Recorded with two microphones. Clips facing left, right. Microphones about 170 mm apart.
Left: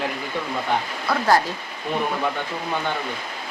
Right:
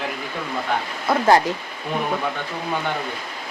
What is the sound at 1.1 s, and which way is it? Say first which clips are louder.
Speech: right 3 dB; 20° right (ahead or behind).